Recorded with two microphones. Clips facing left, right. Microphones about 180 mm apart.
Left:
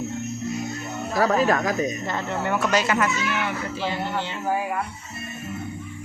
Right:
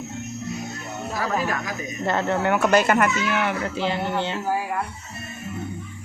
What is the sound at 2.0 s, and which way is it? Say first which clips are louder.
Speech: right 4 dB; 65° right (ahead or behind).